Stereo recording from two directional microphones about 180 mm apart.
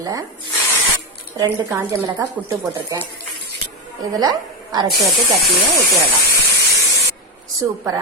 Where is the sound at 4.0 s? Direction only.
20° right (ahead or behind).